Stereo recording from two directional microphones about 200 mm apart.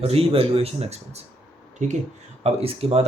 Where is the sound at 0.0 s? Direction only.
30° right (ahead or behind).